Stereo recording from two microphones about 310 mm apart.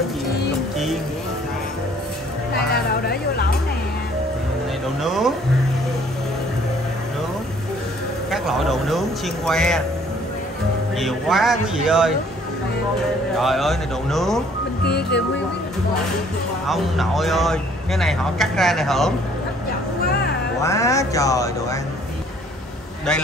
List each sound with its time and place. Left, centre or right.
2.7 s a sound: left
5.0 s a sound: centre
8.3 s a sound: centre
9.5 s speech: centre
11.0 s speech: centre
13.4 s speech: centre
14.9 s speech: left
16.6 s speech: centre
20.6 s a man's voice: centre